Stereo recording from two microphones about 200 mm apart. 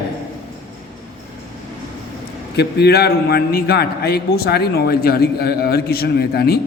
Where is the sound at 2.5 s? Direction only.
55° left (ahead or behind).